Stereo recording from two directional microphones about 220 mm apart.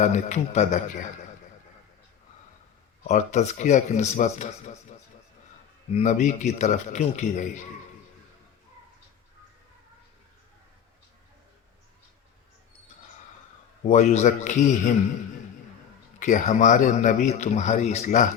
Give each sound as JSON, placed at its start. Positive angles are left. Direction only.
{"t": 0.0, "sound": "a man's voice", "side_deg": 30}
{"t": 3.1, "sound": "a man's voice", "side_deg": 35}
{"t": 13.8, "sound": "a man's voice", "side_deg": 30}
{"t": 16.2, "sound": "a man's voice", "side_deg": 35}